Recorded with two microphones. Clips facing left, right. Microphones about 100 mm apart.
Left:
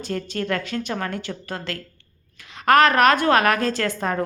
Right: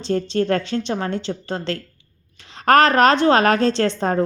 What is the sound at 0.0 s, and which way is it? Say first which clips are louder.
A woman's voice: right 7 dB; 25° right (ahead or behind).